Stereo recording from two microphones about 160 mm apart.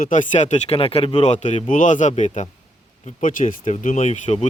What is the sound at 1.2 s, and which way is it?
Speech, 45° left (ahead or behind).